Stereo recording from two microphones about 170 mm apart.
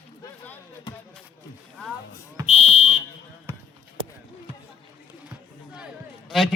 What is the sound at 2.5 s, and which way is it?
Fire alarm, 40° left (ahead or behind).